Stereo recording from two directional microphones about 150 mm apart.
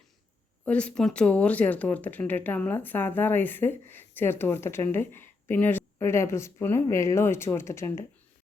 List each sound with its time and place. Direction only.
0.6 s speech: 10° left (ahead or behind)